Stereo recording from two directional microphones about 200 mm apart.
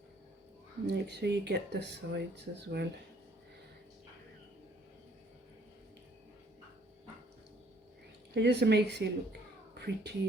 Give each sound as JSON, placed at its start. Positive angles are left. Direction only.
{"t": 0.9, "sound": "speech", "side_deg": -55}
{"t": 8.3, "sound": "speech", "side_deg": -55}